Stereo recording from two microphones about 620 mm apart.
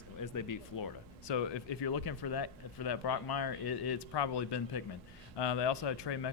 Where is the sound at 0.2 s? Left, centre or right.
Left.